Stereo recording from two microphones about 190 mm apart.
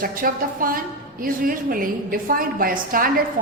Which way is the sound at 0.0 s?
50° right (ahead or behind).